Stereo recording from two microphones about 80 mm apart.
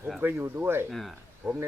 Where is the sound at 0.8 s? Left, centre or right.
Centre.